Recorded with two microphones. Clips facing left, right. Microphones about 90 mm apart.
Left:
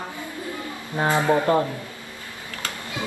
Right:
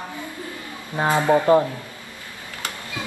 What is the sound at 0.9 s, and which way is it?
Speech, 15° right (ahead or behind).